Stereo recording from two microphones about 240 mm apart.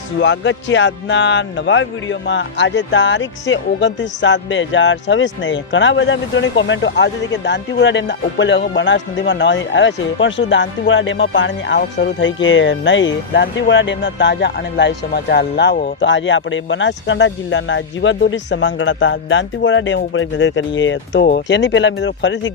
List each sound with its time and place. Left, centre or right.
0.2 s a man's voice: left